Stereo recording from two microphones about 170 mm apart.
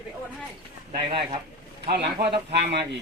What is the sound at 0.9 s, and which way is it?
Speech, 30° right (ahead or behind).